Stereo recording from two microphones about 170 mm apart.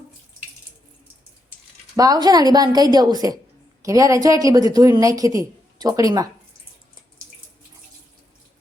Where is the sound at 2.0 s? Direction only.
20° right (ahead or behind).